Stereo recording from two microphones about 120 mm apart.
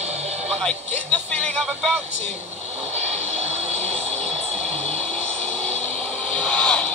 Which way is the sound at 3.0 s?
65° right (ahead or behind).